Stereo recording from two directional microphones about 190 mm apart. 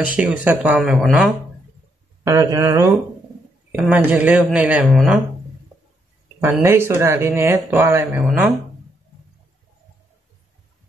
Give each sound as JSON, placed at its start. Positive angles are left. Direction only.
{"t": 0.0, "sound": "speech", "side_deg": -5}
{"t": 2.2, "sound": "speech", "side_deg": -15}
{"t": 6.4, "sound": "speech", "side_deg": -10}